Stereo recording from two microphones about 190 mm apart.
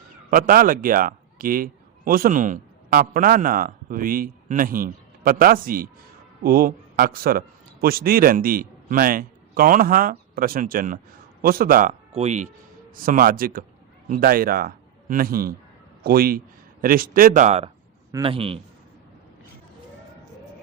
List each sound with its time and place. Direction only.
0.3 s a man's voice: 45° right (ahead or behind)
12.9 s a man's voice: 45° right (ahead or behind); by 18.6 s 30° right (ahead or behind)